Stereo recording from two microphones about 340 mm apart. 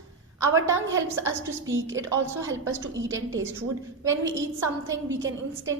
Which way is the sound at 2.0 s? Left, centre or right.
Centre.